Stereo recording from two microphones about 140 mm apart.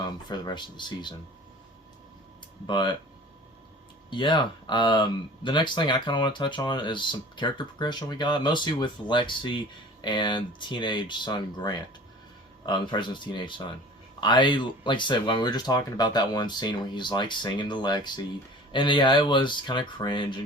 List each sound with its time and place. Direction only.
0.0 s speech: 30° left (ahead or behind)
2.6 s speech: 30° left (ahead or behind)
4.1 s speech: 35° left (ahead or behind)